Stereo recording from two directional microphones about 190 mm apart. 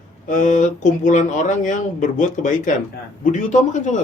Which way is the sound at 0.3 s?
40° left (ahead or behind).